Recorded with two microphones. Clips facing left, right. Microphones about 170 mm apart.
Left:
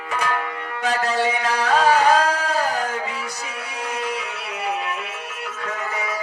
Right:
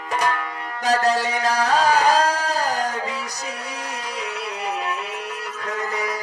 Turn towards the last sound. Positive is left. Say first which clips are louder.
# right 2 dB
turn(degrees=-35)  # may be behind; listen again after turning